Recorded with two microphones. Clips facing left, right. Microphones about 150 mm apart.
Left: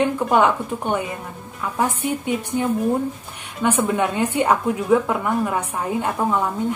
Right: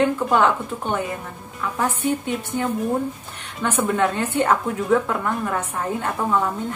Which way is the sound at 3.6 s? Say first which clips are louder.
Left 1 dB; 15° left (ahead or behind).